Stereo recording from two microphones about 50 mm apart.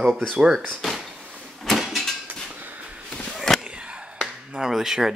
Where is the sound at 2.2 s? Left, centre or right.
Right.